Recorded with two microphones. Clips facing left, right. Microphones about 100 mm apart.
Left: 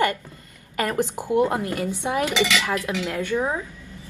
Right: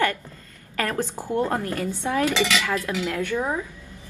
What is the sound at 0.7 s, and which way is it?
Dishes, 20° left (ahead or behind).